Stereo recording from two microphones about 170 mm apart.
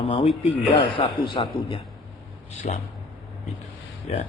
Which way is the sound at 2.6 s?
45° left (ahead or behind).